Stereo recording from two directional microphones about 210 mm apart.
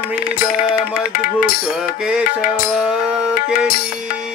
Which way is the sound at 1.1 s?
40° left (ahead or behind).